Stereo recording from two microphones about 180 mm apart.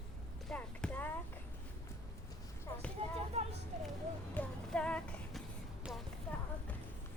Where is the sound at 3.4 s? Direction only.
35° right (ahead or behind).